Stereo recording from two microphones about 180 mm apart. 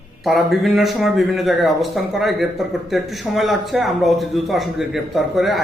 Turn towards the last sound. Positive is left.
turn(degrees=0)  # may be behind; listen again after turning